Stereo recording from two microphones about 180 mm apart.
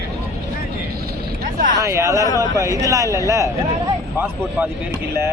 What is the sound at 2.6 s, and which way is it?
Speech, 20° right (ahead or behind).